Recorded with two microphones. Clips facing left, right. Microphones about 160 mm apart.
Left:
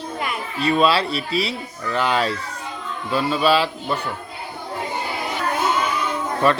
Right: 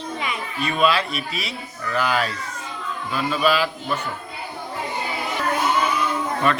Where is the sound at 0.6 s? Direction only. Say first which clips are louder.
Left 3 dB; 35° left (ahead or behind).